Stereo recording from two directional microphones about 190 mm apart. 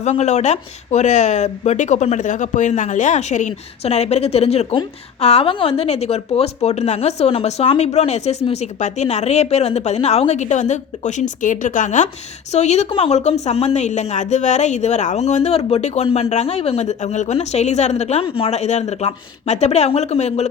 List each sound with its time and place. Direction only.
0.0 s speech: 35° left (ahead or behind)